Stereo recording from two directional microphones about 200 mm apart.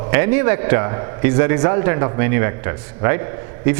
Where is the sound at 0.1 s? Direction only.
10° right (ahead or behind).